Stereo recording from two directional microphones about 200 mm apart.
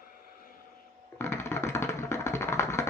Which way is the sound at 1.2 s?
10° left (ahead or behind).